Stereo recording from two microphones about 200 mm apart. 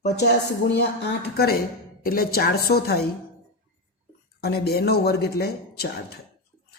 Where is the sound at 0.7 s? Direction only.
55° left (ahead or behind).